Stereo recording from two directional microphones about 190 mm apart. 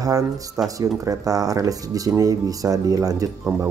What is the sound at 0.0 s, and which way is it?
Speech, 20° right (ahead or behind).